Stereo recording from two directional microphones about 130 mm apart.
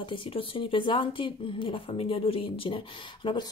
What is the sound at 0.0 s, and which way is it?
Speech, 40° left (ahead or behind).